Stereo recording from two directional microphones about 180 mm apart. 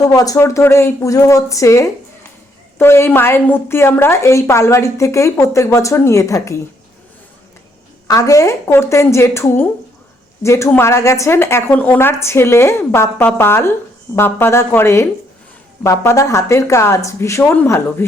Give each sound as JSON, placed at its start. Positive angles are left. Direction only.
{"t": 0.1, "sound": "a woman's voice", "side_deg": 20}
{"t": 8.0, "sound": "a woman's voice", "side_deg": 20}